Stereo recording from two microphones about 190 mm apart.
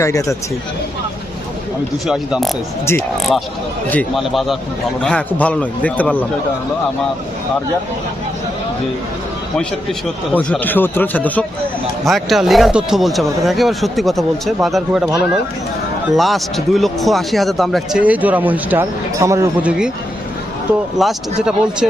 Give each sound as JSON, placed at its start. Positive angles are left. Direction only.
{"t": 0.0, "sound": "a man's voice", "side_deg": 15}
{"t": 2.0, "sound": "a man's voice", "side_deg": 0}
{"t": 10.3, "sound": "a man's voice", "side_deg": 10}
{"t": 16.1, "sound": "a man's voice", "side_deg": 0}
{"t": 21.0, "sound": "a man's voice", "side_deg": 0}